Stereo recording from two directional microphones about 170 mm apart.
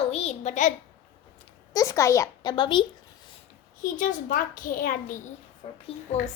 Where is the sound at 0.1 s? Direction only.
40° left (ahead or behind).